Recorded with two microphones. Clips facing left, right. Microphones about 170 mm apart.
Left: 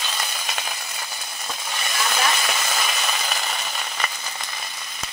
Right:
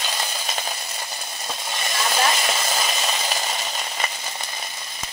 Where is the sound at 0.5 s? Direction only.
30° right (ahead or behind).